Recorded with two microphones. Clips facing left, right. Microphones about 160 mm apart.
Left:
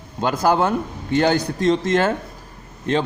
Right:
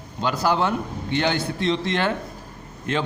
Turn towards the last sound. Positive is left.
turn(degrees=35)  # may be behind; listen again after turning